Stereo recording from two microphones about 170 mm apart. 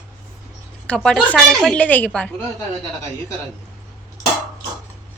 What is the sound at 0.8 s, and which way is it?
A woman's voice, 5° left (ahead or behind).